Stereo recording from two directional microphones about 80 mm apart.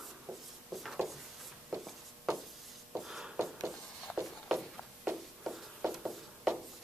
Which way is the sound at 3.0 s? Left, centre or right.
Centre.